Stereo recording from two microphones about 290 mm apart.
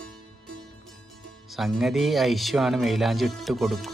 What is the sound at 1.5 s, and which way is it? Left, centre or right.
Speech, centre.